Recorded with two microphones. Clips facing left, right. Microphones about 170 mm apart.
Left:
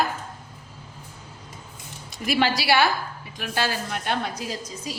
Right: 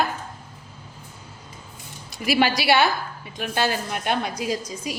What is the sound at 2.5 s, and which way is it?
A woman's voice, 20° right (ahead or behind).